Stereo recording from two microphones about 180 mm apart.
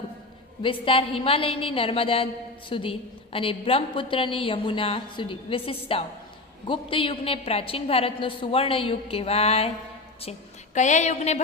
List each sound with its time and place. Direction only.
0.6 s a woman's voice: 30° left (ahead or behind)
10.8 s a woman's voice: 40° left (ahead or behind)